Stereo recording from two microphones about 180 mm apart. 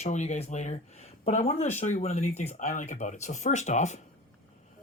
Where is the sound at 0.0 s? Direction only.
40° left (ahead or behind).